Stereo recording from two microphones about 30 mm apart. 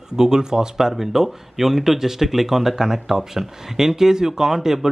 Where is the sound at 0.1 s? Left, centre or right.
Right.